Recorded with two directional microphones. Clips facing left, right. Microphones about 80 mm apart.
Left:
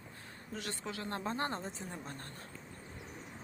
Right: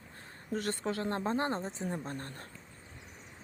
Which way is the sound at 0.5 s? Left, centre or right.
Right.